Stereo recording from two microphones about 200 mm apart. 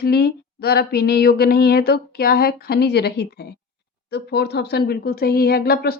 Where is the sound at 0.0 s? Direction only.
50° left (ahead or behind).